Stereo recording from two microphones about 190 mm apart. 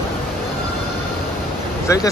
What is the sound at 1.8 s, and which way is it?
Vehicle, 15° left (ahead or behind).